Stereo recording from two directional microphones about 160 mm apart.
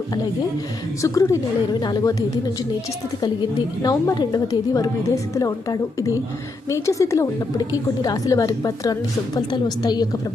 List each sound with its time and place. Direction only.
1.0 s a woman's voice: 20° left (ahead or behind)
3.8 s a woman's voice: 25° left (ahead or behind)